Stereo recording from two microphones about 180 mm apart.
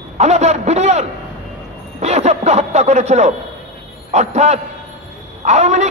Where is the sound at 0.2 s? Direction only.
40° right (ahead or behind).